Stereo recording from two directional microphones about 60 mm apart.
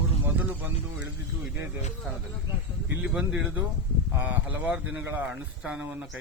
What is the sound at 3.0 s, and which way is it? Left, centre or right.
Speech, centre.